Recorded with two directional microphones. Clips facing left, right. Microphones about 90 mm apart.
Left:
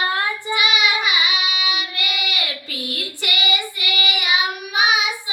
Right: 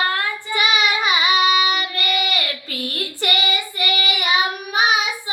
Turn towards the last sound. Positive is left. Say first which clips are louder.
# right 1 dB
turn(degrees=-40)  # may be behind; listen again after turning